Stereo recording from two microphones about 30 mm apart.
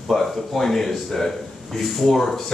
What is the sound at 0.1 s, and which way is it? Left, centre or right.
Speech, centre.